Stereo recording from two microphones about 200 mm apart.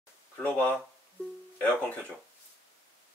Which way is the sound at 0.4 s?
10° left (ahead or behind).